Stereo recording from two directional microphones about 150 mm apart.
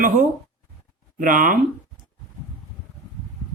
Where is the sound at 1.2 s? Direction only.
65° right (ahead or behind).